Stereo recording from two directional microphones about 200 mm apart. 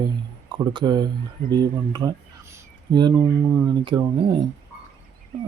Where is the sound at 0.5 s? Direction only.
20° right (ahead or behind).